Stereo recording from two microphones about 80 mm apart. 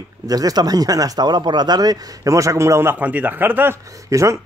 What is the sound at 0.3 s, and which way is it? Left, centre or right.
Speech, right.